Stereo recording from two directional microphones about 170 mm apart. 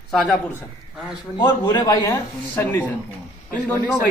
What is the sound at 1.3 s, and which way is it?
A man's voice, 25° left (ahead or behind).